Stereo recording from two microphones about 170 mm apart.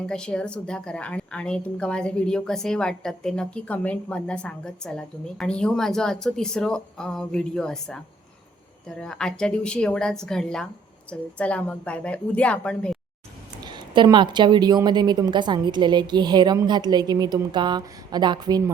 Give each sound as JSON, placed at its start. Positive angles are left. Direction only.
{"t": 0.0, "sound": "a woman's voice", "side_deg": 5}
{"t": 13.6, "sound": "a woman's voice", "side_deg": -25}